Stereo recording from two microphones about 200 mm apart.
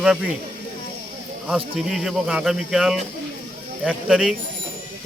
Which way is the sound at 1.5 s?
Centre (ahead or behind).